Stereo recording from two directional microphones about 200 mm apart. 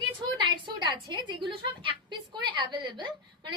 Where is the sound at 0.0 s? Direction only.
20° right (ahead or behind).